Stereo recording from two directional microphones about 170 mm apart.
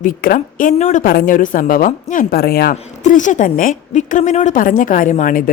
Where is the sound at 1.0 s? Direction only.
60° left (ahead or behind).